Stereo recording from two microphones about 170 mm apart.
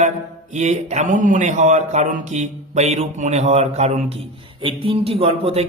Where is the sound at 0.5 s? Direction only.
40° right (ahead or behind).